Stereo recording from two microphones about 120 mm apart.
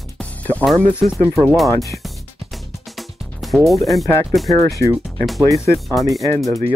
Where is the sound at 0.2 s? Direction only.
15° left (ahead or behind).